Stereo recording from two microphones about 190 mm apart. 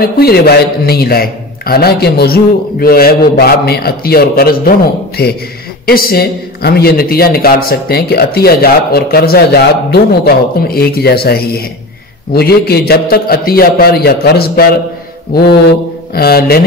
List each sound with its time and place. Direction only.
0.0 s a man's voice: 55° left (ahead or behind)
16.2 s a man's voice: 55° left (ahead or behind)